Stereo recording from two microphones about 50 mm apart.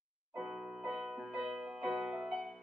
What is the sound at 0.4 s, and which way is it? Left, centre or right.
Music, centre.